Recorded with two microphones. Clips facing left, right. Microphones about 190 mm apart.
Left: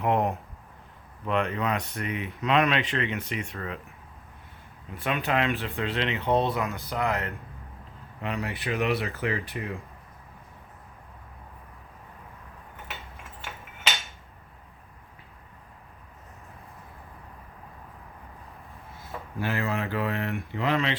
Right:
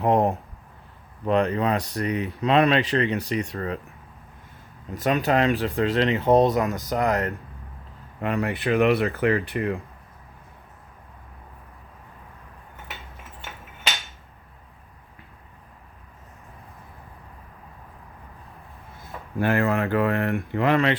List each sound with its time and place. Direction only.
0.0 s speech: 35° right (ahead or behind)
4.9 s speech: 40° right (ahead or behind)
8.2 s speech: 55° right (ahead or behind)
19.4 s speech: 55° right (ahead or behind)